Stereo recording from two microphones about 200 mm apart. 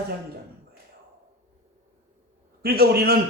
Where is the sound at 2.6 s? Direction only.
50° right (ahead or behind).